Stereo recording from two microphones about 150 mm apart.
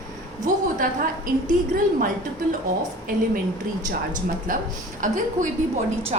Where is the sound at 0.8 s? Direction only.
70° right (ahead or behind).